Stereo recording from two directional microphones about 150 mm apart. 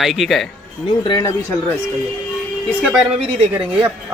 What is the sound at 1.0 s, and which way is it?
Speech, 30° left (ahead or behind).